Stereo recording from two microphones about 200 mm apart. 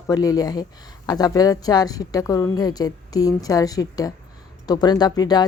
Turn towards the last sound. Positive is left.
turn(degrees=20)  # may be behind; listen again after turning